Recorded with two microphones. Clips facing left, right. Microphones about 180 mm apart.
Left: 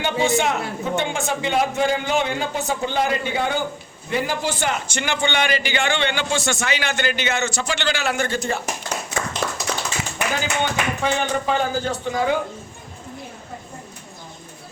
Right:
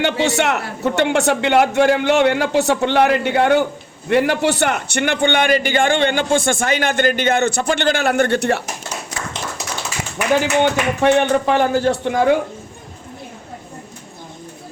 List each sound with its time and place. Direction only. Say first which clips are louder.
0.0 s a man's voice: right 3 dB; 75° right (ahead or behind)
10.4 s a man's voice: right 7 dB; 65° right (ahead or behind)